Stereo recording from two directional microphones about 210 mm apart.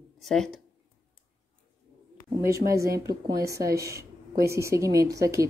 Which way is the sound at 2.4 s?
15° right (ahead or behind).